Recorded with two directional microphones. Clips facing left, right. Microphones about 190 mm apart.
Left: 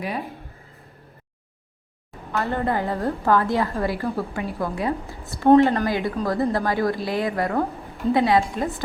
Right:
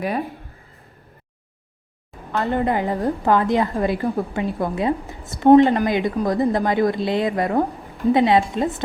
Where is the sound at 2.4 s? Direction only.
15° right (ahead or behind).